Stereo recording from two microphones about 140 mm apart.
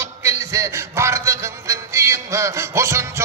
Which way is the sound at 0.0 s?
20° right (ahead or behind).